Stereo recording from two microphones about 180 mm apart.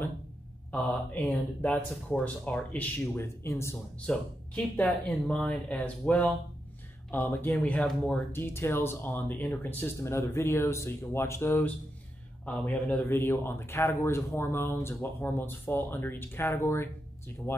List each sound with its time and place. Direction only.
0.7 s speech: 10° left (ahead or behind)